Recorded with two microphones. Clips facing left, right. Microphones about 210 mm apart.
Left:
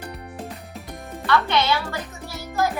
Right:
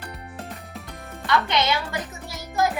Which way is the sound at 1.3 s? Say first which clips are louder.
Left 2 dB; 20° right (ahead or behind).